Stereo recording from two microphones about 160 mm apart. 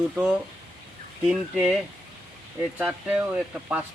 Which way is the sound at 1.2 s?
5° right (ahead or behind).